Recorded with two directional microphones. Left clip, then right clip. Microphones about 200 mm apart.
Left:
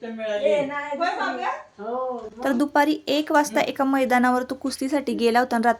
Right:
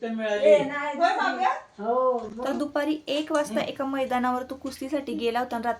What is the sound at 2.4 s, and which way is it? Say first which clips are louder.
A woman's voice: left 7 dB; 45° left (ahead or behind).